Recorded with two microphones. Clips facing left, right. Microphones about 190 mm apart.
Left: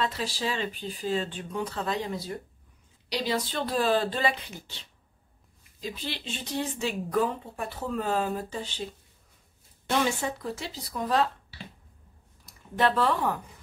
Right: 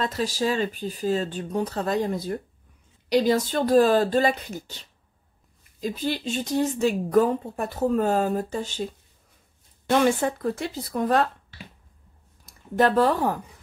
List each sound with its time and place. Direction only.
0.0 s a woman's voice: 45° right (ahead or behind)
12.7 s speech: 45° right (ahead or behind)